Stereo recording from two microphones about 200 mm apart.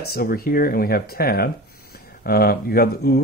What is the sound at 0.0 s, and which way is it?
Speech, 50° left (ahead or behind).